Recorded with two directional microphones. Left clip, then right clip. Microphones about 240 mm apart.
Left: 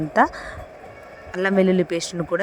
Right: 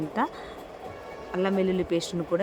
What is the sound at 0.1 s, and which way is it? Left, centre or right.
Speech, left.